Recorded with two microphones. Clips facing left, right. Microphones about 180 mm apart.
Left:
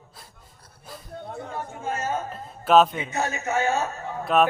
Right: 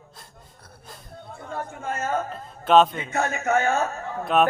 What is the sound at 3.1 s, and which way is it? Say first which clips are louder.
Speech: right 3 dB; 55° right (ahead or behind).